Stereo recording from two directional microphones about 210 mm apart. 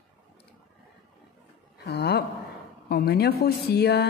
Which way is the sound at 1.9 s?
50° left (ahead or behind).